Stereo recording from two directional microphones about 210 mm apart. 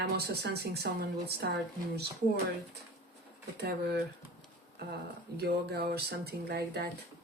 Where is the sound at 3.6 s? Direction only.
50° right (ahead or behind).